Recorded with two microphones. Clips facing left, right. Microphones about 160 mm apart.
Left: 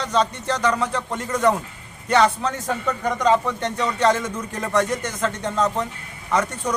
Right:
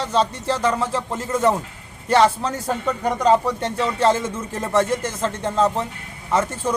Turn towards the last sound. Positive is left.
turn(degrees=-30)  # may be behind; listen again after turning